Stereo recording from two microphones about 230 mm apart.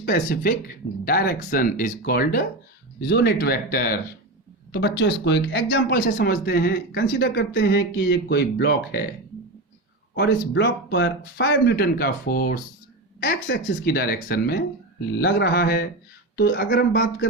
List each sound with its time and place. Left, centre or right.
0.0 s speech: left
10.2 s speech: left